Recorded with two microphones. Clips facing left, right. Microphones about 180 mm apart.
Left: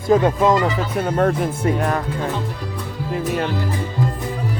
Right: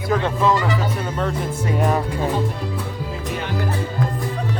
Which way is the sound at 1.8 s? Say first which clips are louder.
Right 1 dB; 5° right (ahead or behind).